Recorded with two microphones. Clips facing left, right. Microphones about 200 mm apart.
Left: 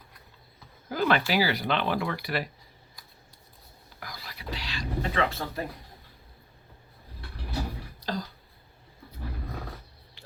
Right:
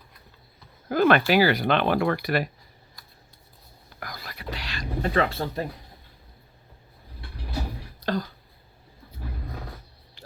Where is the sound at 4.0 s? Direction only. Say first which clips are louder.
Right 4 dB; 55° right (ahead or behind); by 5.6 s 30° right (ahead or behind).